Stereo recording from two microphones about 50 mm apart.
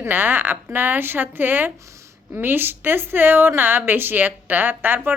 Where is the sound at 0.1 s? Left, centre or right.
Right.